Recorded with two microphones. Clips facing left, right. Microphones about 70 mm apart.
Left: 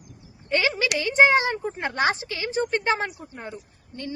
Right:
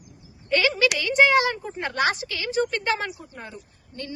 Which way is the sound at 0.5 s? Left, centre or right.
Left.